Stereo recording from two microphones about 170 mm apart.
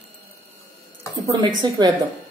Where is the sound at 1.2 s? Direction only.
25° right (ahead or behind).